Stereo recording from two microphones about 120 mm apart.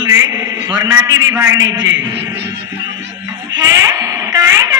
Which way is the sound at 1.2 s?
25° right (ahead or behind).